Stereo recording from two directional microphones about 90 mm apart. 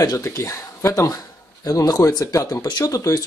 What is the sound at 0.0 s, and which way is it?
Speech, 40° left (ahead or behind).